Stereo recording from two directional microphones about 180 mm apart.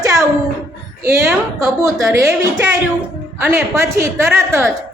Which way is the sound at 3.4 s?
15° right (ahead or behind).